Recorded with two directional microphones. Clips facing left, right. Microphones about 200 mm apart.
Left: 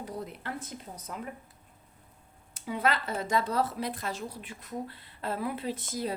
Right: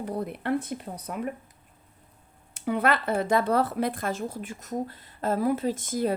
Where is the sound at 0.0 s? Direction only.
60° right (ahead or behind).